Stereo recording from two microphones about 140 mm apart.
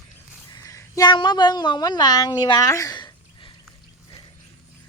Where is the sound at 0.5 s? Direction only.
25° left (ahead or behind).